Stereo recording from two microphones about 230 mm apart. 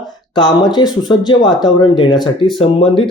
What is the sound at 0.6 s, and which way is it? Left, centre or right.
Speech, centre.